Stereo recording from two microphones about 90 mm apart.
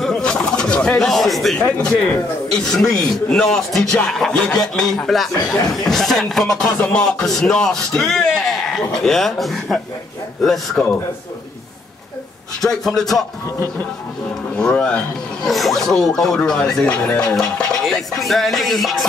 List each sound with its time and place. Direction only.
0.0 s pigeon: 5° left (ahead or behind)
1.6 s speech: 10° left (ahead or behind)
12.6 s speech: 5° left (ahead or behind)
14.6 s speech: 10° left (ahead or behind)